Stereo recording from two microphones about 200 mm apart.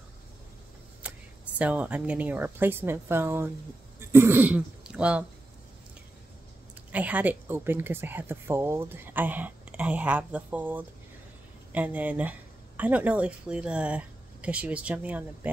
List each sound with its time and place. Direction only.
1.0 s a sound: 5° right (ahead or behind)
1.6 s speech: 5° right (ahead or behind)
6.9 s speech: 5° right (ahead or behind)